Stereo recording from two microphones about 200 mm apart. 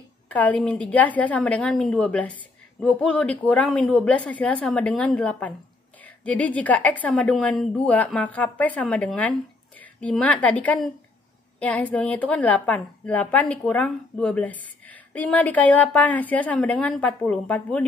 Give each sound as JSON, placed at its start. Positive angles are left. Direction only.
{"t": 0.3, "sound": "a woman's voice", "side_deg": 5}